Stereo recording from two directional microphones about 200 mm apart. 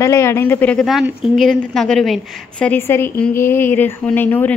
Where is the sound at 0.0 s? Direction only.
15° left (ahead or behind).